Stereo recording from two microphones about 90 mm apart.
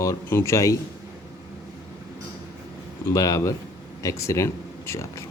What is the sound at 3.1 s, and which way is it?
Speech, 40° left (ahead or behind).